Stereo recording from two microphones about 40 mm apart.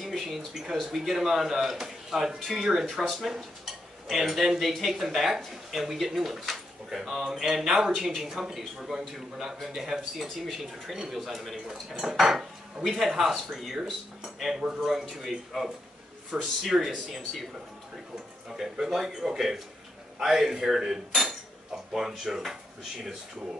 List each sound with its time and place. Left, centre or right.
0.0 s a sound: centre
0.7 s speech: centre
10.2 s speech: centre
18.6 s speech: centre